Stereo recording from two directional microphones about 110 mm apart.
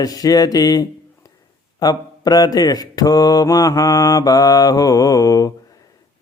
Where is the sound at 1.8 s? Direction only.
35° left (ahead or behind).